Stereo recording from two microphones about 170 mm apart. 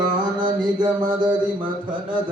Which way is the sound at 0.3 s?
25° right (ahead or behind).